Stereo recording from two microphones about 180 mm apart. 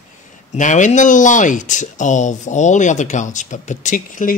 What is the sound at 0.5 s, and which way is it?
Speech, 45° left (ahead or behind).